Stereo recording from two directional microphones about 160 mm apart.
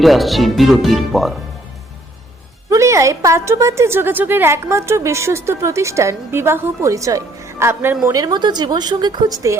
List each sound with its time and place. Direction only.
0.0 s speech: centre (ahead or behind)
2.6 s a woman's voice: 20° right (ahead or behind)